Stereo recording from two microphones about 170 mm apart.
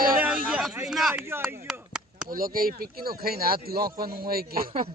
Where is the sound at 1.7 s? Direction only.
5° right (ahead or behind).